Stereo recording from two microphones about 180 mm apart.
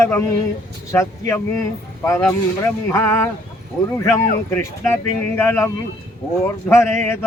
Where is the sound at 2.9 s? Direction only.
10° left (ahead or behind).